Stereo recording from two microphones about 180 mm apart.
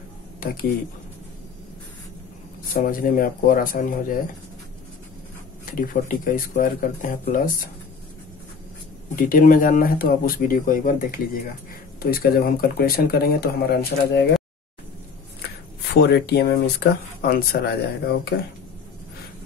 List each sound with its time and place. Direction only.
0.4 s speech: 55° left (ahead or behind)
2.7 s speech: 55° left (ahead or behind)
5.7 s speech: 50° left (ahead or behind)
9.1 s speech: 50° left (ahead or behind); by 14.4 s 65° left (ahead or behind)
15.9 s speech: 65° left (ahead or behind)